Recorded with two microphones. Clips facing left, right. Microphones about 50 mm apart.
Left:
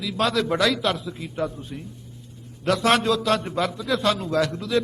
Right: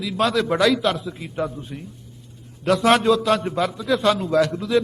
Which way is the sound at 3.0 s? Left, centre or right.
Centre.